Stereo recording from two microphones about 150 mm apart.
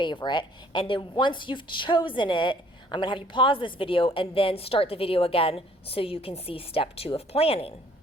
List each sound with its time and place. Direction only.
0.0 s a woman's voice: 30° left (ahead or behind)